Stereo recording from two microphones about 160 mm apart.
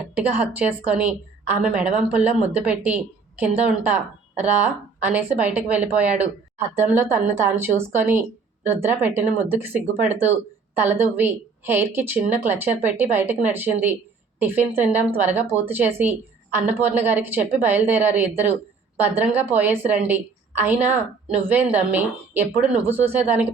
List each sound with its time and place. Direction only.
0.1 s a woman's voice: 10° right (ahead or behind)